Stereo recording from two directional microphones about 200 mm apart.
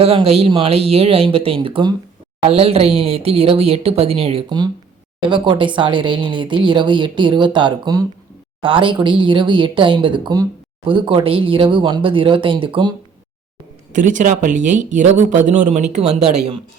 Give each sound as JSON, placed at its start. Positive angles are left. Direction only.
{"t": 0.0, "sound": "speech", "side_deg": -30}
{"t": 13.9, "sound": "speech", "side_deg": -40}